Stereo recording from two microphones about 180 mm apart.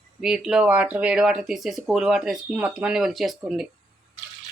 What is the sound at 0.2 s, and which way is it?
Speech, 5° right (ahead or behind).